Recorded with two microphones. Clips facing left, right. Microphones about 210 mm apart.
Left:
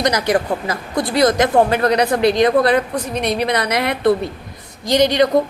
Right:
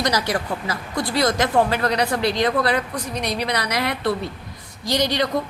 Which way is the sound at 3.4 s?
55° left (ahead or behind).